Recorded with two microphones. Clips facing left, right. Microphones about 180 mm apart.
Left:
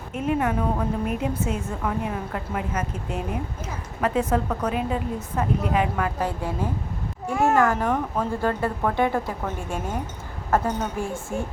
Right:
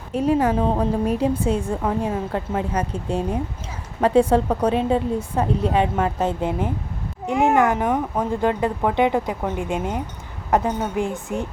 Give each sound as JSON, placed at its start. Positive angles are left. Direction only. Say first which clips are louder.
{"t": 0.1, "sound": "a woman's voice", "louder": "right 5 dB", "side_deg": -35}